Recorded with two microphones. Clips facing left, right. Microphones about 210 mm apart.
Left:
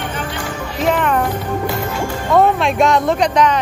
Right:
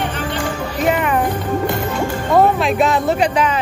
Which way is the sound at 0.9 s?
5° right (ahead or behind).